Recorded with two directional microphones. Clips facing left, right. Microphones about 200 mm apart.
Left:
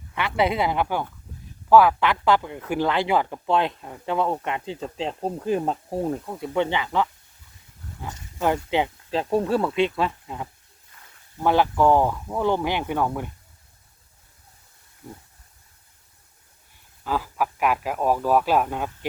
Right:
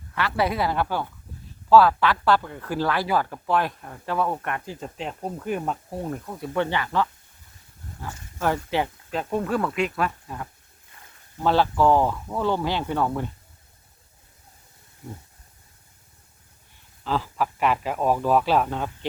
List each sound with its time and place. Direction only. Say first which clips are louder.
0.1 s speech: left 2 dB; 20° left (ahead or behind)
9.1 s speech: left 3 dB; 30° left (ahead or behind); by 13.3 s 10° left (ahead or behind)
17.0 s speech: even; 10° left (ahead or behind)